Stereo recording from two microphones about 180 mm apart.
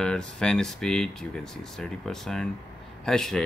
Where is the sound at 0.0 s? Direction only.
5° left (ahead or behind).